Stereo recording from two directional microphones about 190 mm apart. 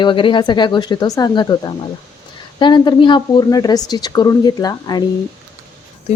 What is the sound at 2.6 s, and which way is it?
Speech, 25° left (ahead or behind).